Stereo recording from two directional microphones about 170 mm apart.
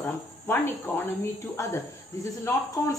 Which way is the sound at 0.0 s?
15° left (ahead or behind).